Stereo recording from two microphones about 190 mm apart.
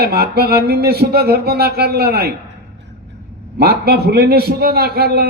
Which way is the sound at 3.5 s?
55° right (ahead or behind).